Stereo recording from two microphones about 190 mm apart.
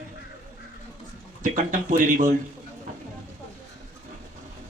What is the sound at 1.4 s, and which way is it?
Speech, 45° right (ahead or behind).